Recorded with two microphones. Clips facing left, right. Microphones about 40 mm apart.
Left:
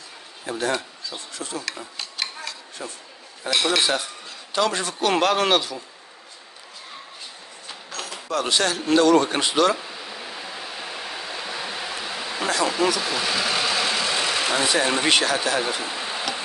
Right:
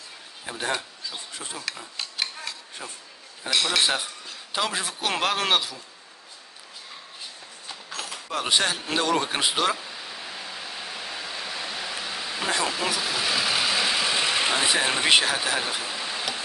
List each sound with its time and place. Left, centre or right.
0.5 s a man's voice: centre
1.8 s a sound: centre
3.4 s a man's voice: centre
7.9 s keys jangling: centre
8.3 s a man's voice: centre
9.8 s pink noise: centre
12.6 s speech: centre
13.0 s vehicle: centre
15.8 s a sound: centre